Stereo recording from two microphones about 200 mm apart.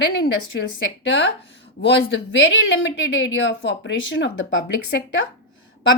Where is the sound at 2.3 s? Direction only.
65° left (ahead or behind).